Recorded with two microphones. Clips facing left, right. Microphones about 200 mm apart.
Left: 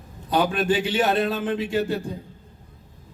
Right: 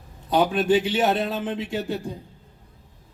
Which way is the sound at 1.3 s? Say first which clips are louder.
Left 3 dB; 20° right (ahead or behind).